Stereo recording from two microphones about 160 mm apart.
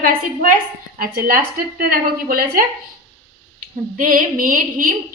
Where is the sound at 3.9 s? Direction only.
60° right (ahead or behind).